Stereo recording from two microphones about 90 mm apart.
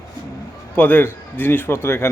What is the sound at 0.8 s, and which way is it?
Speech, 20° left (ahead or behind).